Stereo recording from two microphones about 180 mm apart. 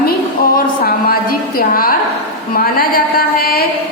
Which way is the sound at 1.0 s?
55° left (ahead or behind).